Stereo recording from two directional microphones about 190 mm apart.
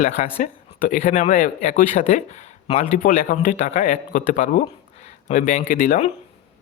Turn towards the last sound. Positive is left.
turn(degrees=45)  # may be behind; listen again after turning